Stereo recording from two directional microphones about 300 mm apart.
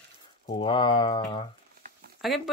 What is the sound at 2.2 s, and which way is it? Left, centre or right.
Speech, centre.